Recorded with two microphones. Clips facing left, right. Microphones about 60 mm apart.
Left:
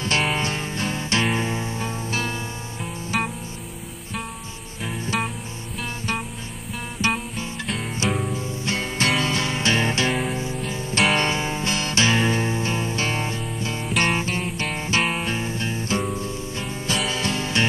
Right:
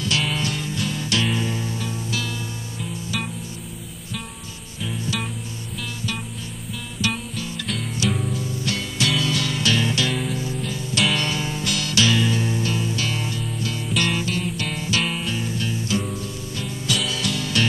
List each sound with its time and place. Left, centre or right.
0.3 s music: left
7.0 s music: left